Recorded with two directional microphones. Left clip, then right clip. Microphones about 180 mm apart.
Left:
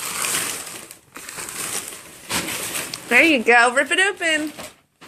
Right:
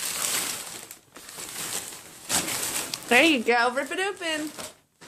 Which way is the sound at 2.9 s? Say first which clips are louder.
Left 4 dB; 15° right (ahead or behind).